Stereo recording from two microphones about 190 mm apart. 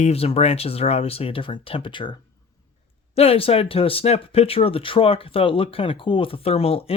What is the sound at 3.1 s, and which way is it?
Speech, 30° left (ahead or behind).